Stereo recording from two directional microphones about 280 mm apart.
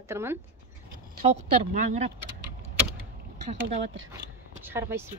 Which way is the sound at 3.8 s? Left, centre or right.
Right.